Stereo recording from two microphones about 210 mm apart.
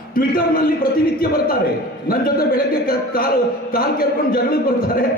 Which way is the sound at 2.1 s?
45° left (ahead or behind).